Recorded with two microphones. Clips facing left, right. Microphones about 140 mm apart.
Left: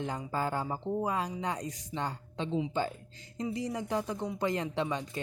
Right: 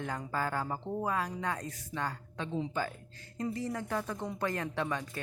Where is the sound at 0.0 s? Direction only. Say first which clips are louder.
Left 2 dB; 20° left (ahead or behind).